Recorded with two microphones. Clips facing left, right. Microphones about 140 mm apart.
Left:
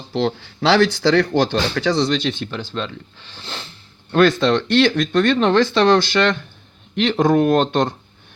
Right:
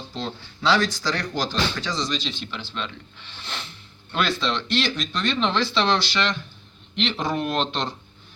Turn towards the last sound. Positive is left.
turn(degrees=50)  # may be behind; listen again after turning